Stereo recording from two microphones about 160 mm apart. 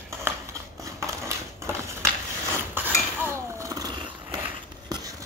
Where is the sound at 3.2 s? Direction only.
15° right (ahead or behind).